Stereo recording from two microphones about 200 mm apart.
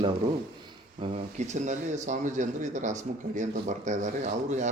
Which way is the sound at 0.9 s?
35° right (ahead or behind).